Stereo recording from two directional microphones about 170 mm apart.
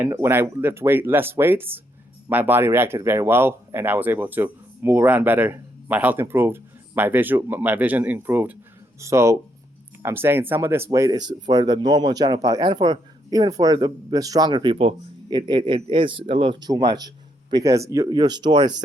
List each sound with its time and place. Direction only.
0.0 s speech: 15° right (ahead or behind)